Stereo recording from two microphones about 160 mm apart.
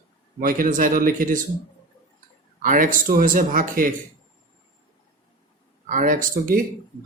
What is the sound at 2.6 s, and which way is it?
Speech, 60° right (ahead or behind).